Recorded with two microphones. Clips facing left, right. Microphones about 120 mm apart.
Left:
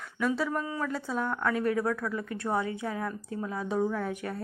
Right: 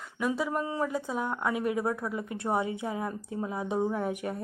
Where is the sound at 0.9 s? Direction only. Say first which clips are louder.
Even; 15° right (ahead or behind).